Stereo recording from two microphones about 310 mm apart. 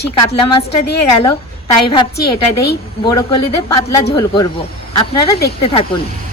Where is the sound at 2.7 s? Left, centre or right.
Centre.